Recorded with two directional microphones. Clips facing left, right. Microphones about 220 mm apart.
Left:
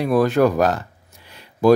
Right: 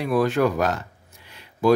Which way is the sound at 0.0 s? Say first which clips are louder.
Left 4 dB; 40° left (ahead or behind).